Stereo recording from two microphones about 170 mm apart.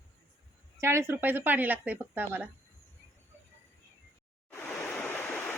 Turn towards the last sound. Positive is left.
turn(degrees=10)  # may be behind; listen again after turning